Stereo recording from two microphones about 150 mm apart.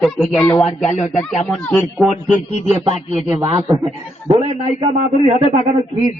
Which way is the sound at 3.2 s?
20° right (ahead or behind).